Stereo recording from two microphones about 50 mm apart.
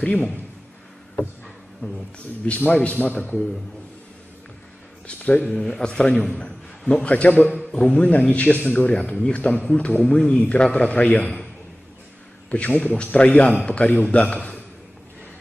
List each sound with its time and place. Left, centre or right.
0.0 s a man's voice: left
2.1 s a man's voice: left
5.0 s speech: left
5.6 s a man's voice: centre
12.4 s a man's voice: left